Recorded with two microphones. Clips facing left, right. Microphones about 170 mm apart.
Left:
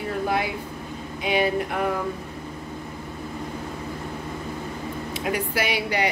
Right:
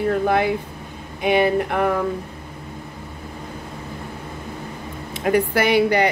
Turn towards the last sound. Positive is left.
turn(degrees=-55)  # may be behind; listen again after turning